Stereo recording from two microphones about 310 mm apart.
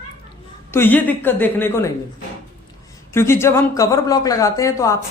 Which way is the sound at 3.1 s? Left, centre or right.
Centre.